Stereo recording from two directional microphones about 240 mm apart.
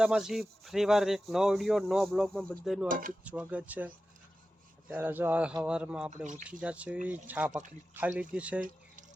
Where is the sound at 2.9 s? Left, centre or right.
Right.